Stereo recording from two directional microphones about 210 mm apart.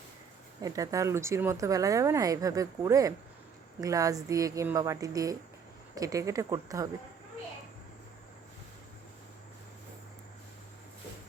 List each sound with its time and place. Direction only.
0.6 s speech: 15° right (ahead or behind)